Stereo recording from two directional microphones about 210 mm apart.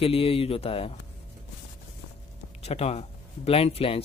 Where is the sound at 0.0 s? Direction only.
25° left (ahead or behind).